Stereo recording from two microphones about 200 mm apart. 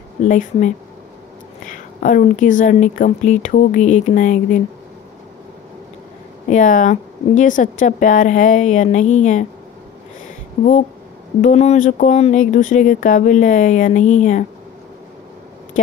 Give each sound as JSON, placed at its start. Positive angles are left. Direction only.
{"t": 0.2, "sound": "speech", "side_deg": 40}
{"t": 6.5, "sound": "speech", "side_deg": 40}
{"t": 11.4, "sound": "speech", "side_deg": 35}